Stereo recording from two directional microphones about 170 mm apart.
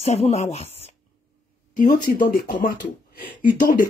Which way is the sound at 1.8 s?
50° left (ahead or behind).